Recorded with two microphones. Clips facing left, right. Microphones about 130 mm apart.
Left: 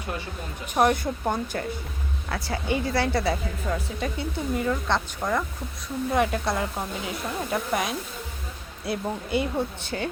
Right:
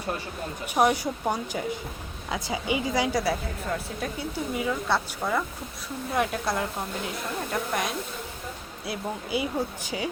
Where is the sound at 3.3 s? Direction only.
Centre (ahead or behind).